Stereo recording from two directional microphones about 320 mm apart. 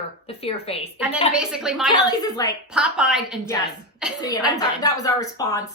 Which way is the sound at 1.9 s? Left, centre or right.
Centre.